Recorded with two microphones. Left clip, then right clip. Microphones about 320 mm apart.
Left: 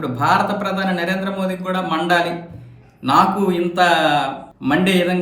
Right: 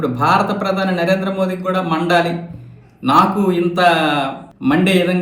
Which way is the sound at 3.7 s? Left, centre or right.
Left.